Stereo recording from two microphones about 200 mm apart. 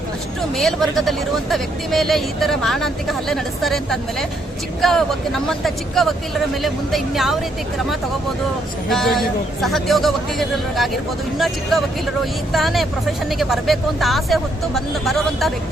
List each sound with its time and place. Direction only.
0.5 s speech: centre (ahead or behind)
8.9 s speech: centre (ahead or behind)